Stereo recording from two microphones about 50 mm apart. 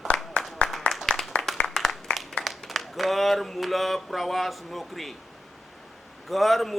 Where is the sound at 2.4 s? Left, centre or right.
Centre.